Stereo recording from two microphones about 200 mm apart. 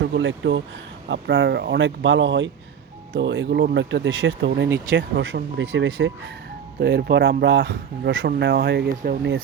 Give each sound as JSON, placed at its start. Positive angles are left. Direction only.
{"t": 0.0, "sound": "speech", "side_deg": -65}